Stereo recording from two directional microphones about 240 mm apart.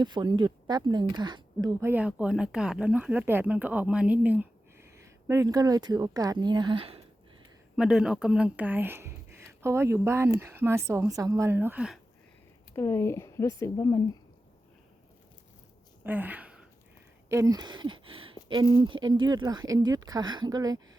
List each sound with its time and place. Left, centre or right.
0.0 s speech: centre
7.8 s speech: centre
12.7 s speech: centre
16.0 s speech: centre